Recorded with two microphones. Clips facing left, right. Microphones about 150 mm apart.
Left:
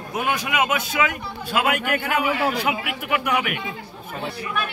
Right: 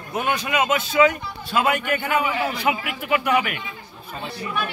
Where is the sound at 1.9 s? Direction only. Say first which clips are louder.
Even; 75° left (ahead or behind).